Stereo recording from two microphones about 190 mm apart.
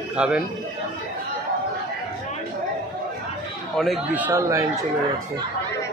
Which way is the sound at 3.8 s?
Centre (ahead or behind).